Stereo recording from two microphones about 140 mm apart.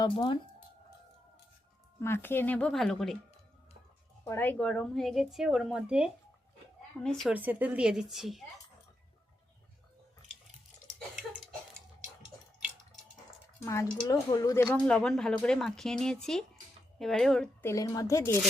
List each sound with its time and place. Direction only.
0.0 s speech: 35° left (ahead or behind)
2.0 s speech: 15° left (ahead or behind)
4.2 s a woman's voice: 15° left (ahead or behind); by 6.1 s 5° right (ahead or behind)
7.0 s a woman's voice: 5° left (ahead or behind)
7.3 s speech: 10° right (ahead or behind)
14.1 s speech: 25° left (ahead or behind)
14.8 s a woman's voice: 5° left (ahead or behind)
17.6 s a woman's voice: 20° left (ahead or behind)